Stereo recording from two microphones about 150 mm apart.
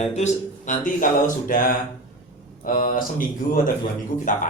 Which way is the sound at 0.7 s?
60° left (ahead or behind).